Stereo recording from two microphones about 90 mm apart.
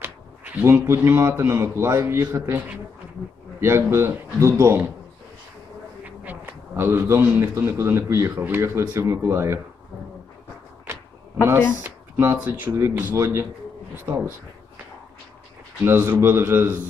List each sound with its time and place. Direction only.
0.0 s speech: 20° right (ahead or behind)
3.6 s a man's voice: 30° right (ahead or behind)
6.0 s a sound: 20° right (ahead or behind)
6.7 s a man's voice: 25° right (ahead or behind)
10.9 s cupboard open or close: 30° right (ahead or behind)
11.8 s a man's voice: 25° right (ahead or behind)
15.8 s a man's voice: 25° right (ahead or behind)